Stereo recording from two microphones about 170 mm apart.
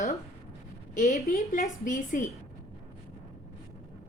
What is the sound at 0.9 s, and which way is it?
A woman's voice, 50° left (ahead or behind).